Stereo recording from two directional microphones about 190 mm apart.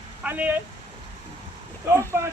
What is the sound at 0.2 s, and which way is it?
Speech, 10° right (ahead or behind).